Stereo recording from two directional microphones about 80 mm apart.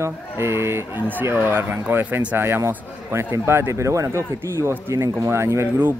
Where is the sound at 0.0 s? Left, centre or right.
Right.